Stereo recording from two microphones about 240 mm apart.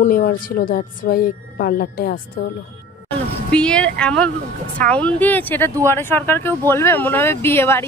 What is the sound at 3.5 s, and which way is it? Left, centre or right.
Speech, centre.